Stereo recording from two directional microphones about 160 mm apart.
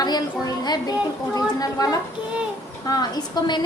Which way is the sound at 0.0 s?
25° left (ahead or behind).